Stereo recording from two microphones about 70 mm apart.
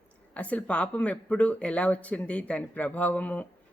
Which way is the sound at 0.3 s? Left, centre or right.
Centre.